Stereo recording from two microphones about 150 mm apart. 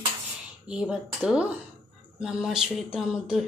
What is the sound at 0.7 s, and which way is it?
A woman's voice, 5° right (ahead or behind).